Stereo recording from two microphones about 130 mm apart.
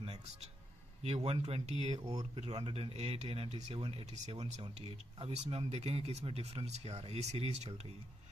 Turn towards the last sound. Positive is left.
turn(degrees=-55)  # may be behind; listen again after turning